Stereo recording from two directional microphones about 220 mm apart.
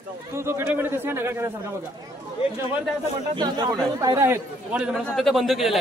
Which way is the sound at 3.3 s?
20° right (ahead or behind).